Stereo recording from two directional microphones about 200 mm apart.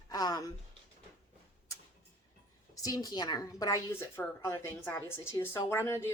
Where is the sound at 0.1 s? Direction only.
20° left (ahead or behind).